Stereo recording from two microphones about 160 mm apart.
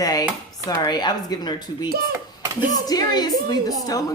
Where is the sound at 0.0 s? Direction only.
25° left (ahead or behind).